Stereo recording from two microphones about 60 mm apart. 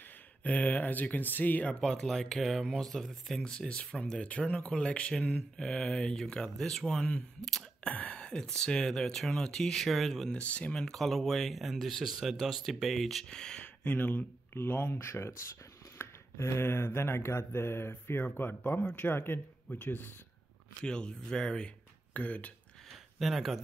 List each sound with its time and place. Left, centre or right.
0.4 s speech: left
1.8 s speech: centre
3.4 s speech: centre
10.3 s speech: left
10.8 s speech: centre
13.8 s speech: left
16.0 s mantra: left
18.3 s speech: left
20.8 s speech: centre
22.1 s speech: left
23.1 s speech: centre